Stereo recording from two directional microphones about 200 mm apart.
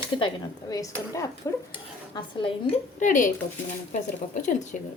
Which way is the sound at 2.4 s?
35° left (ahead or behind).